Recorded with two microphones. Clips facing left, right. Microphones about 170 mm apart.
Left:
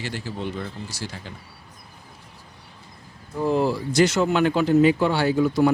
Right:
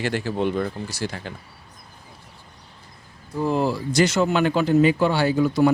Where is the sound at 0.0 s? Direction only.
65° right (ahead or behind).